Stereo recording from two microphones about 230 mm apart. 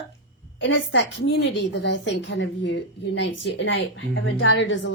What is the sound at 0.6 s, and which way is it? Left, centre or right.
Speech, left.